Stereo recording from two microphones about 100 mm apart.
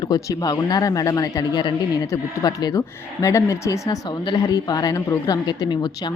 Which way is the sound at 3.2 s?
30° left (ahead or behind).